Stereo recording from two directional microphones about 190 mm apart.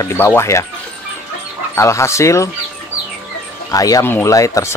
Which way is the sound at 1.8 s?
15° left (ahead or behind).